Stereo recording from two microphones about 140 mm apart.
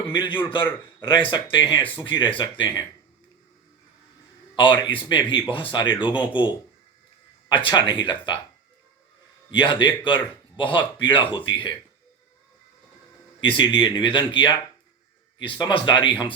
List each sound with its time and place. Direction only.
0.1 s speech: 35° left (ahead or behind)
4.5 s speech: 35° left (ahead or behind)
9.5 s speech: 35° left (ahead or behind)
13.4 s speech: 35° left (ahead or behind)